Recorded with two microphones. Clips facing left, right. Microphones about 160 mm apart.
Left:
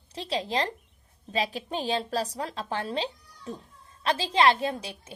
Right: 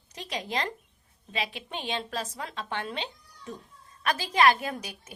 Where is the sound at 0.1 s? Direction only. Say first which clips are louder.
Left 4 dB; 30° left (ahead or behind).